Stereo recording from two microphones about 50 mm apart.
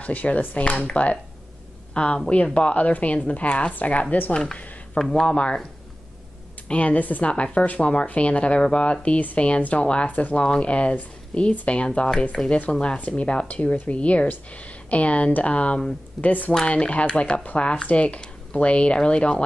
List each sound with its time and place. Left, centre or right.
0.0 s speech: left
4.3 s speech: centre
4.9 s speech: centre
5.2 s speech: left
6.7 s speech: left
7.2 s speech: left
12.4 s speech: centre
12.9 s speech: left
16.6 s speech: left